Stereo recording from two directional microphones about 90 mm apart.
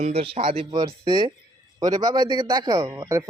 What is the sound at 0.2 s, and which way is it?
Speech, 90° right.